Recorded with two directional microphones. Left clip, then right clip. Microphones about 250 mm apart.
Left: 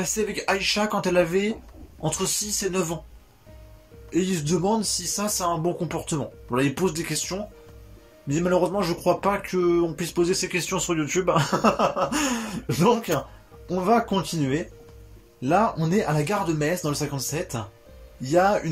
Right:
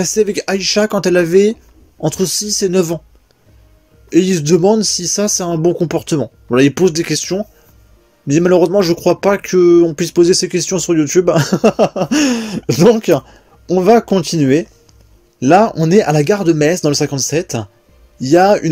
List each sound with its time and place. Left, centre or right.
0.0 s speech: right
4.1 s speech: right